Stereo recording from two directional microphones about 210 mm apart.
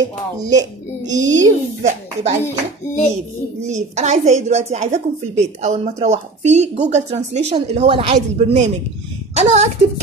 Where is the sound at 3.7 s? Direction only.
35° right (ahead or behind).